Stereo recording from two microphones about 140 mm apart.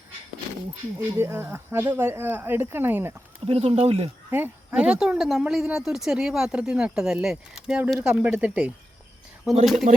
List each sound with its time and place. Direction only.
1.1 s speech: 20° right (ahead or behind)
3.4 s speech: 45° right (ahead or behind)
4.3 s speech: 15° right (ahead or behind)
9.9 s speech: 60° right (ahead or behind)